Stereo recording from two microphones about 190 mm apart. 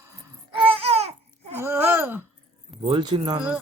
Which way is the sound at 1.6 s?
10° right (ahead or behind).